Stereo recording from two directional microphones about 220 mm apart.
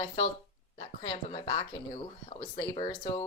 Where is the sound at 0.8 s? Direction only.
25° left (ahead or behind).